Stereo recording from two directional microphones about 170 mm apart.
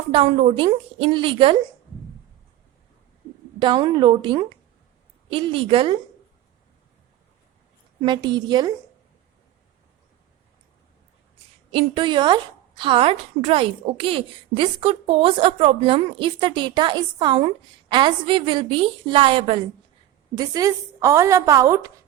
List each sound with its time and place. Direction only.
0.1 s a woman's voice: 35° right (ahead or behind)
3.6 s a woman's voice: 25° right (ahead or behind)
8.0 s speech: 25° right (ahead or behind)
11.7 s a woman's voice: 30° right (ahead or behind)